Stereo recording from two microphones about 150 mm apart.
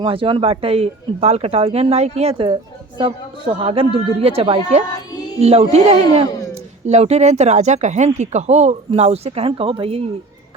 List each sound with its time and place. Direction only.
0.0 s speech: 35° right (ahead or behind)